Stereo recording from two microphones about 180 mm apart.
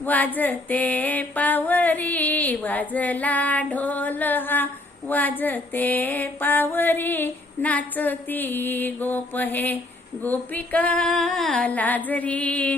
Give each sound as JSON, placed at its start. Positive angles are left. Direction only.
{"t": 0.0, "sound": "female singing", "side_deg": 10}